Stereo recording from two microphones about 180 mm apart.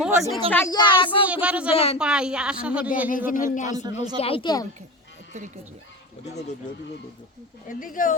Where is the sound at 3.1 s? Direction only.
50° left (ahead or behind).